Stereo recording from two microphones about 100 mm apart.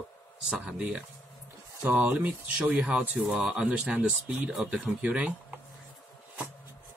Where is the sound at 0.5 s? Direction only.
10° right (ahead or behind).